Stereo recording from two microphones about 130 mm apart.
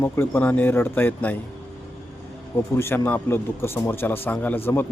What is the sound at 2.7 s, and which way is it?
Speech, 20° left (ahead or behind).